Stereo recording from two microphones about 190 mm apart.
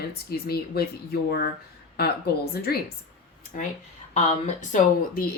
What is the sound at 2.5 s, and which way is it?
Speech, 55° left (ahead or behind).